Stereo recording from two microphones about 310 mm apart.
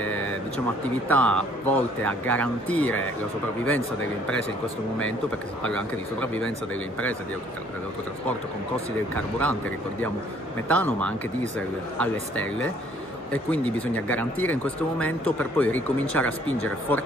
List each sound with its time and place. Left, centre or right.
1.0 s speech: centre
5.6 s speech: centre
9.1 s speech: centre
10.7 s speech: centre